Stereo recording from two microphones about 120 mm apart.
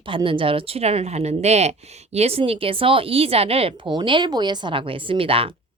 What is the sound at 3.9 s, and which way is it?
A woman's voice, 40° right (ahead or behind).